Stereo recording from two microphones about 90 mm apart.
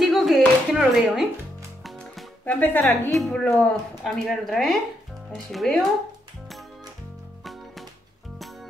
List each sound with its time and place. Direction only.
0.0 s a sound: centre (ahead or behind)
0.7 s speech: centre (ahead or behind)
1.8 s music: centre (ahead or behind)
2.4 s speech: 20° left (ahead or behind)
2.8 s a woman's voice: 5° left (ahead or behind)